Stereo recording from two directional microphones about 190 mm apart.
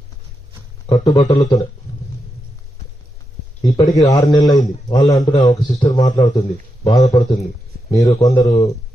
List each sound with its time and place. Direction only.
0.8 s a man's voice: 20° left (ahead or behind)
3.7 s a man's voice: 20° left (ahead or behind)